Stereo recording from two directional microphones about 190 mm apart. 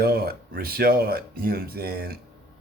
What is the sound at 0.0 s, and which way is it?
A man's voice, 55° right (ahead or behind).